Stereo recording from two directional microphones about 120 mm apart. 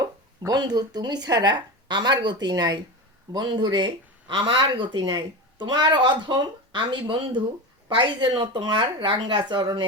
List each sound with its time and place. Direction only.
0.0 s speech: 35° right (ahead or behind)